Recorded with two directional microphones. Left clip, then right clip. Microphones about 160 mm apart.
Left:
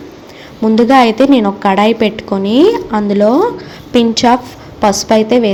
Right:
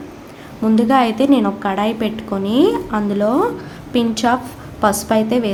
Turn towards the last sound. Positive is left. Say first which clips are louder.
# left 7 dB
turn(degrees=25)  # may be behind; listen again after turning